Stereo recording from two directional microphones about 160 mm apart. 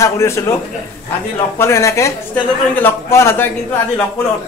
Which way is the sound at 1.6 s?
20° left (ahead or behind).